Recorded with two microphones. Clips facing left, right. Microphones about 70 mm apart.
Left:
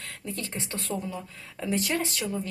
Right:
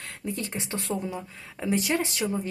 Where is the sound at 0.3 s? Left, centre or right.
Centre.